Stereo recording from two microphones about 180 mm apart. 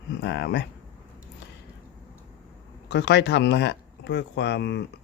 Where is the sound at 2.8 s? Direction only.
75° left (ahead or behind).